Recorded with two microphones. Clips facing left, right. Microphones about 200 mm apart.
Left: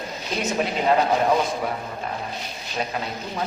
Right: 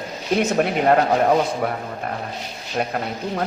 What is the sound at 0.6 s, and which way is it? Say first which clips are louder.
Speech: right 2 dB; 55° right (ahead or behind).